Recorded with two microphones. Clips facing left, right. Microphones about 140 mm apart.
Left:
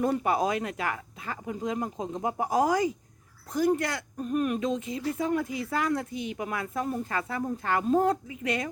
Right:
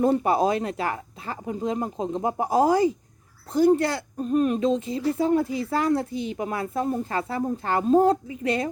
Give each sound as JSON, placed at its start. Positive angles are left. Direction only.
{"t": 0.0, "sound": "speech", "side_deg": -30}